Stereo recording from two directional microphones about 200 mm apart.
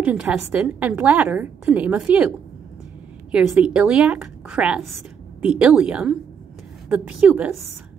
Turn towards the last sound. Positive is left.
turn(degrees=-5)  # may be behind; listen again after turning